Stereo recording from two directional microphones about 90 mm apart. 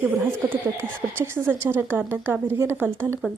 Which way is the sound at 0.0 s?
25° right (ahead or behind).